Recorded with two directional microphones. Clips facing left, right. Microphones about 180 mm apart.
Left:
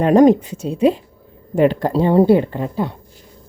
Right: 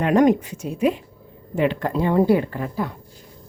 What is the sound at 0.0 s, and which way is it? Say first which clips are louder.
Speech: left 5 dB; 35° left (ahead or behind).